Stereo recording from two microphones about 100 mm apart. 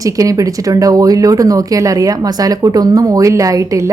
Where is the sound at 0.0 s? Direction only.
35° right (ahead or behind).